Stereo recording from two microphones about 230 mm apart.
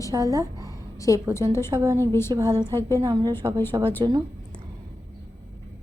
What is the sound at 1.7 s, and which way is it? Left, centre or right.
A woman's voice, centre.